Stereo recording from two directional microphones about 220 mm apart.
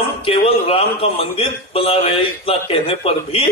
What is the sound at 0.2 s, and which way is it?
A man's voice, 25° left (ahead or behind).